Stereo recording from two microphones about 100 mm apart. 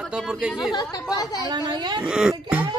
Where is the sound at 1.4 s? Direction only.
45° right (ahead or behind).